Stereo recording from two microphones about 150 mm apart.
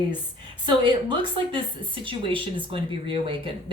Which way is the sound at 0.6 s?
30° right (ahead or behind).